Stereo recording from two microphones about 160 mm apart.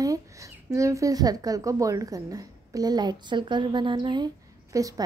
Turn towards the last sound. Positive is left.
turn(degrees=-20)  # may be behind; listen again after turning